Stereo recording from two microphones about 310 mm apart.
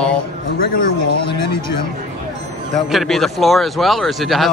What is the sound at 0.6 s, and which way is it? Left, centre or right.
Speech, left.